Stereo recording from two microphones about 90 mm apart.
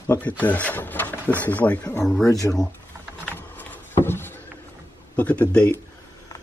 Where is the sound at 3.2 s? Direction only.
20° left (ahead or behind).